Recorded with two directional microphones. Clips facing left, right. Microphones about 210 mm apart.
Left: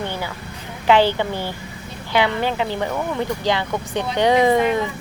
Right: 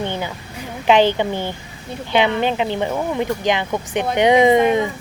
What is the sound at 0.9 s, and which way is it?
Speech, 20° right (ahead or behind).